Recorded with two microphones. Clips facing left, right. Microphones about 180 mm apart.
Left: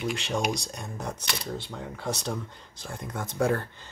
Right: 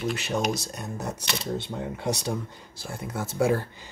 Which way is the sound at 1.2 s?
25° right (ahead or behind).